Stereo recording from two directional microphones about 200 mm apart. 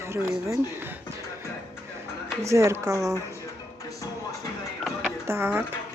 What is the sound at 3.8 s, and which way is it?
Music, 15° left (ahead or behind).